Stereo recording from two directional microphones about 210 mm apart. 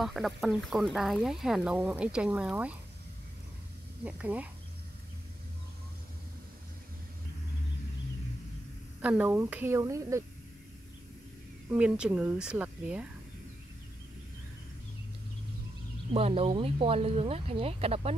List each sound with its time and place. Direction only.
0.0 s speech: centre (ahead or behind)
4.0 s a woman's voice: 5° right (ahead or behind)
9.0 s a woman's voice: 5° right (ahead or behind)
11.7 s a woman's voice: 5° right (ahead or behind)
16.1 s speech: 30° right (ahead or behind)